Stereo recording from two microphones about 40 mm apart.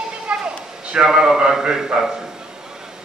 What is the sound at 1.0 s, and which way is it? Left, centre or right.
Speech, centre.